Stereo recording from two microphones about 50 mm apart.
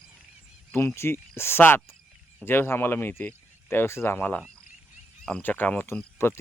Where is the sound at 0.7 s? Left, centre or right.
Left.